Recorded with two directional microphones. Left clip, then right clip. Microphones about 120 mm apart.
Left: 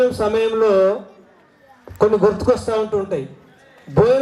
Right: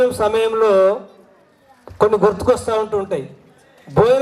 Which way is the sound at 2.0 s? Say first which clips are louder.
Right 1 dB; 45° right (ahead or behind).